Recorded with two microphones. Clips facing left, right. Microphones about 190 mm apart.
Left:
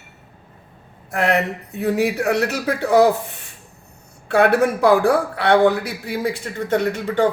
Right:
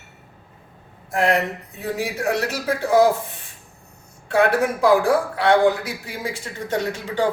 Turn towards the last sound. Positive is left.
turn(degrees=60)  # may be behind; listen again after turning